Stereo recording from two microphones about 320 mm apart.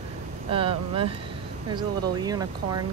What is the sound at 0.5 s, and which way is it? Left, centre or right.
A woman's voice, centre.